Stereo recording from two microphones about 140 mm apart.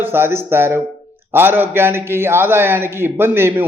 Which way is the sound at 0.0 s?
15° right (ahead or behind).